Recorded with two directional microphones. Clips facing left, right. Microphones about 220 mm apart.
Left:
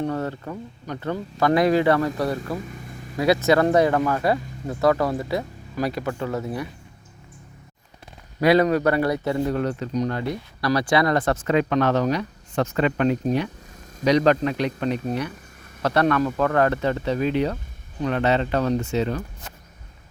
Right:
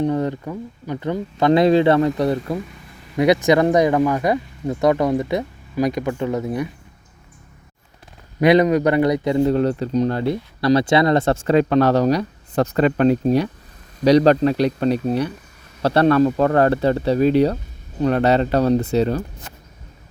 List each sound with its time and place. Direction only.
0.0 s speech: 15° right (ahead or behind)
8.4 s speech: 20° right (ahead or behind)
9.5 s speech: 30° right (ahead or behind)